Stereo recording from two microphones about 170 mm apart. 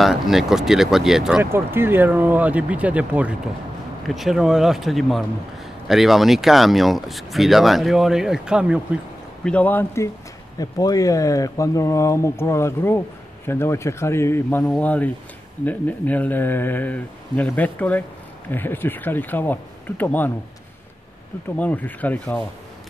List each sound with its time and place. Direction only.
0.0 s speech: centre (ahead or behind)
9.4 s speech: 5° left (ahead or behind)
10.6 s speech: 20° left (ahead or behind)
21.5 s speech: 10° left (ahead or behind)